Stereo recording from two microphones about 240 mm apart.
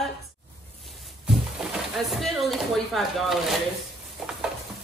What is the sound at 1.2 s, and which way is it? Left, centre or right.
Speech, centre.